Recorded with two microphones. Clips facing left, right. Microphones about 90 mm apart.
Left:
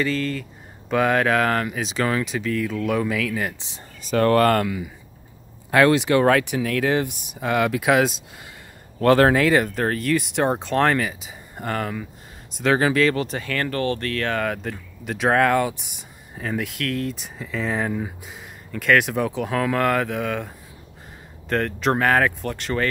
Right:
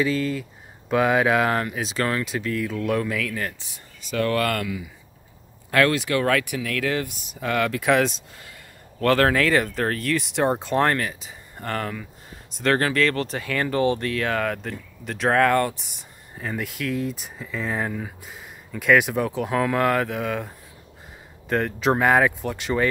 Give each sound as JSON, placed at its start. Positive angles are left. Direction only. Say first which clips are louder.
{"t": 0.0, "sound": "speech", "louder": "right 1 dB", "side_deg": -5}
{"t": 3.5, "sound": "speech", "louder": "left 4 dB", "side_deg": 25}
{"t": 4.0, "sound": "speech", "louder": "left 6 dB", "side_deg": 40}
{"t": 5.7, "sound": "speech", "louder": "left 4 dB", "side_deg": 20}
{"t": 9.0, "sound": "speech", "louder": "left 3 dB", "side_deg": 20}